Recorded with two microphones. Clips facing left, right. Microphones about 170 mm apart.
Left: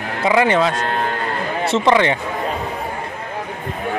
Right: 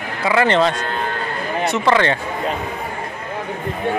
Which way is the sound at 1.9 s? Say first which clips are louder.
Left 1 dB; 15° left (ahead or behind).